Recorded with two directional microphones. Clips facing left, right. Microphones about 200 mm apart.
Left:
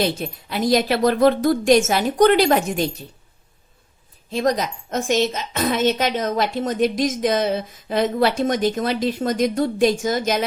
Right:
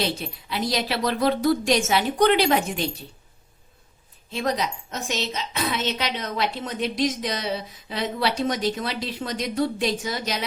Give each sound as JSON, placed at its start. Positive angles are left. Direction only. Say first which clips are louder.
{"t": 0.0, "sound": "a woman's voice", "louder": "left 5 dB", "side_deg": 50}
{"t": 4.3, "sound": "a woman's voice", "louder": "left 5 dB", "side_deg": 40}